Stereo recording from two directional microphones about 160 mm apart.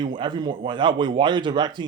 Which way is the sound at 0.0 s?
30° right (ahead or behind).